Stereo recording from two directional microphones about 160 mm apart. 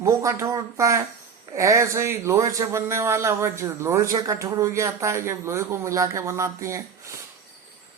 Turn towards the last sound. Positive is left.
turn(degrees=-20)  # may be behind; listen again after turning